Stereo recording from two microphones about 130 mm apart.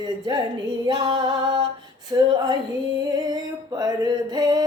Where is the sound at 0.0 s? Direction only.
30° right (ahead or behind).